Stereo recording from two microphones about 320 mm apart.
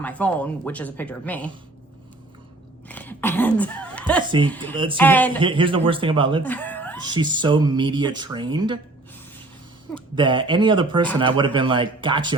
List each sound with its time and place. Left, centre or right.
0.0 s speech: centre
2.9 s a sound: centre
4.4 s speech: centre
5.4 s speech: centre
6.4 s speech: centre
7.0 s speech: centre
10.2 s speech: centre